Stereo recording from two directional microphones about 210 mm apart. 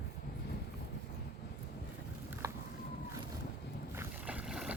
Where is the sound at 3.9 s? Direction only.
10° right (ahead or behind).